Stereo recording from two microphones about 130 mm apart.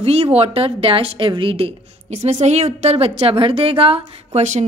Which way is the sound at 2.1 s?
60° right (ahead or behind).